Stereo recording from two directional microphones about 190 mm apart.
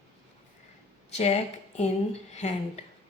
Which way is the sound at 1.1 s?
35° left (ahead or behind).